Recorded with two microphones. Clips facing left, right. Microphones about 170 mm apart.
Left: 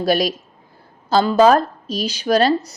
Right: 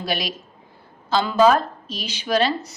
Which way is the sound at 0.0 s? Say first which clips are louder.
Left 9 dB; 40° left (ahead or behind).